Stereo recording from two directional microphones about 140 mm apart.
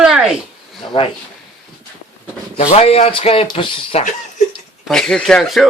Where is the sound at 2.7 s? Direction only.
50° left (ahead or behind).